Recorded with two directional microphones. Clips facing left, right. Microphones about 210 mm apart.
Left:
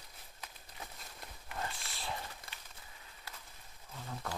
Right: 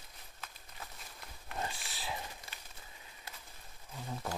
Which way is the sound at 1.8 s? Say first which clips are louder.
Even; centre (ahead or behind).